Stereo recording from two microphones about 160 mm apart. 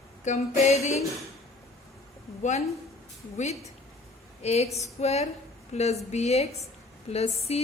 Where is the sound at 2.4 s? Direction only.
45° left (ahead or behind).